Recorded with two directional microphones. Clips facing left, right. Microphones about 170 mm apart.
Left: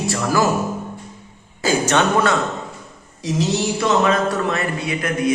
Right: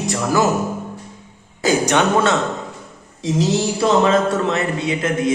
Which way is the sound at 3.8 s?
25° right (ahead or behind).